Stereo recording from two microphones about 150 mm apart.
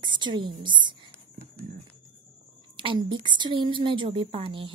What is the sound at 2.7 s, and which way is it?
A woman's voice, 35° right (ahead or behind).